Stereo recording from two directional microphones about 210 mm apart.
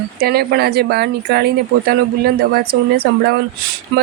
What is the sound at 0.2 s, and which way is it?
Speech, 50° right (ahead or behind).